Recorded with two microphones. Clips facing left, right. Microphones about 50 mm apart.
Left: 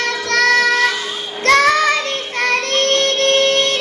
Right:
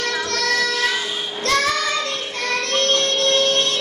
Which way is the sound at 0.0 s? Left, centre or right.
Left.